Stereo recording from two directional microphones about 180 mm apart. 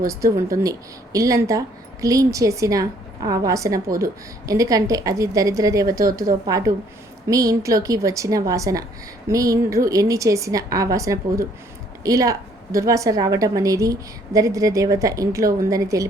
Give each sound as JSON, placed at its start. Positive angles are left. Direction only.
{"t": 0.1, "sound": "a woman's voice", "side_deg": -15}